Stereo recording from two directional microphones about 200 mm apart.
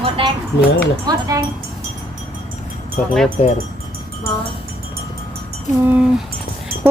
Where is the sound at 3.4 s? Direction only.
35° left (ahead or behind).